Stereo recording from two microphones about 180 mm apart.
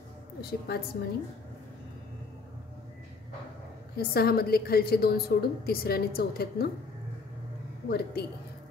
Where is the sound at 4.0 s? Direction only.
60° left (ahead or behind).